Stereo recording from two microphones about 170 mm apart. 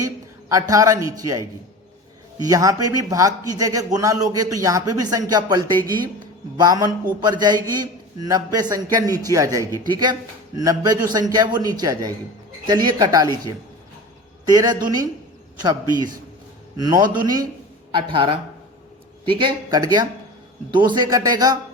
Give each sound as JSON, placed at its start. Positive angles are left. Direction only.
{"t": 0.0, "sound": "a sound", "side_deg": -20}
{"t": 0.7, "sound": "speech", "side_deg": -20}
{"t": 14.4, "sound": "speech", "side_deg": -25}